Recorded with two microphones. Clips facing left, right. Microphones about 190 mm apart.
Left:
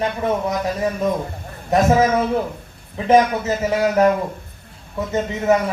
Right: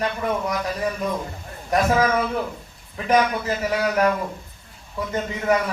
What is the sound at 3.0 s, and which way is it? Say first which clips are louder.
Speech: left 5 dB; 25° left (ahead or behind).